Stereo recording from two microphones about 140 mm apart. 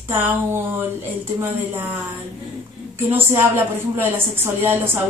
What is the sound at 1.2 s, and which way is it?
Speech, 15° right (ahead or behind).